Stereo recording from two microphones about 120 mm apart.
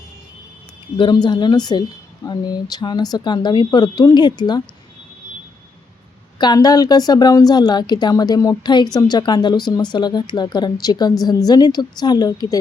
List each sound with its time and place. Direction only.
0.9 s a woman's voice: 40° left (ahead or behind)
6.4 s a woman's voice: 35° left (ahead or behind)